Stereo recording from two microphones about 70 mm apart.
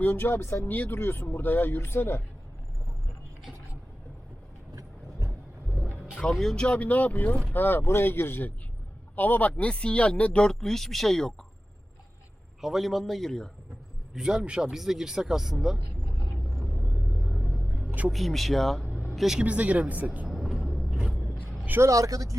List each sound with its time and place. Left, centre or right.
0.0 s speech: left
4.7 s vehicle: right
6.3 s speech: centre
12.6 s speech: centre
14.1 s speech: centre
17.2 s rumble: centre
18.1 s a man's voice: centre
19.4 s speech: centre
20.2 s vehicle: centre
20.6 s vehicle: centre
21.8 s speech: right